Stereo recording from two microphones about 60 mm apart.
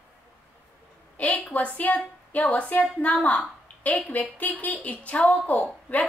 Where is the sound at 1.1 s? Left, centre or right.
Left.